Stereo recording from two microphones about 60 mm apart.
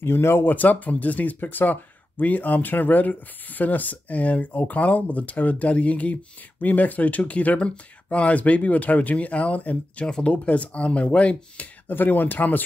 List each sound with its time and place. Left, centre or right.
0.0 s speech: left
10.0 s speech: centre
11.9 s speech: left